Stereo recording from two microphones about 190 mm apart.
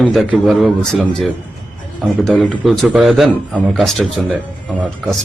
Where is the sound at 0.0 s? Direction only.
Centre (ahead or behind).